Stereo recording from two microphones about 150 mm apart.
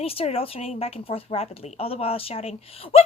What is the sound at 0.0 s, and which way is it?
Speech, 40° left (ahead or behind).